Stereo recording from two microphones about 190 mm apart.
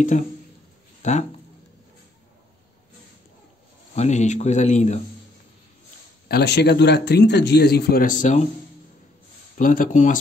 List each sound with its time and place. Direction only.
0.1 s speech: 40° left (ahead or behind)
3.9 s speech: 35° left (ahead or behind)
6.2 s a man's voice: 60° left (ahead or behind); by 8.5 s 40° left (ahead or behind)
9.6 s speech: 45° left (ahead or behind)